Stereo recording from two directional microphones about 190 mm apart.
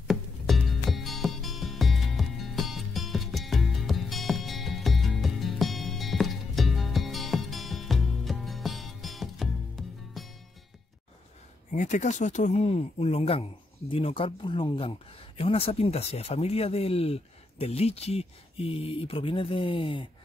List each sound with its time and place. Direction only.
0.1 s music: centre (ahead or behind)
11.7 s speech: 40° left (ahead or behind)